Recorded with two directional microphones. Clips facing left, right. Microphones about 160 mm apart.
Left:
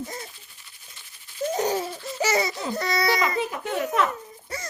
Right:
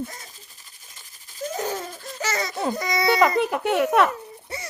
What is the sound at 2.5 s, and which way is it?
Baby laughter, 50° right (ahead or behind).